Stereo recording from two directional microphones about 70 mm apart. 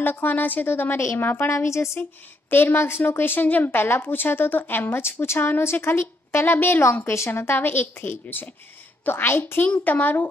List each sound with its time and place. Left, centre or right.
0.0 s a woman's voice: left